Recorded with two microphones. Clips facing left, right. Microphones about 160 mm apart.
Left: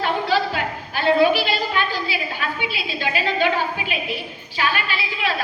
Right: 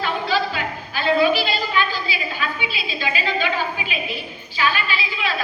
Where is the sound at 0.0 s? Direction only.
60° left (ahead or behind).